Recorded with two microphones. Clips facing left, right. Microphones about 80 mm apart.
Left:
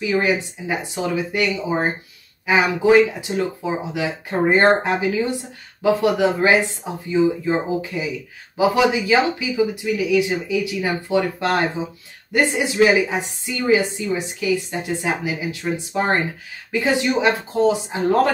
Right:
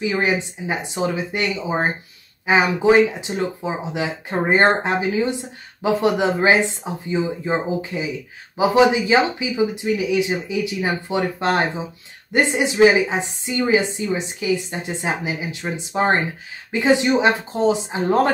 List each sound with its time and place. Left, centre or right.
0.0 s speech: right